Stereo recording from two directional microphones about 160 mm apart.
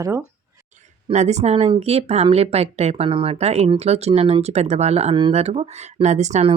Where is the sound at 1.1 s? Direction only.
45° right (ahead or behind).